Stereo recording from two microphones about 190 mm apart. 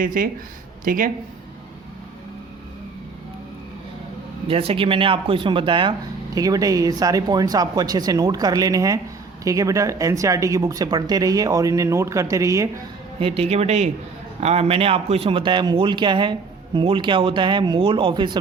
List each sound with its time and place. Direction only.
0.0 s speech: 45° right (ahead or behind)
4.4 s a man's voice: 30° right (ahead or behind)
13.1 s a man's voice: 30° right (ahead or behind)